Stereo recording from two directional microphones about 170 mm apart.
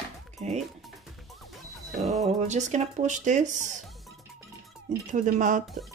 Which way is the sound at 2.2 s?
45° right (ahead or behind).